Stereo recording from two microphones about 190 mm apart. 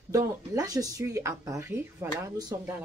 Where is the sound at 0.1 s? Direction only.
15° right (ahead or behind).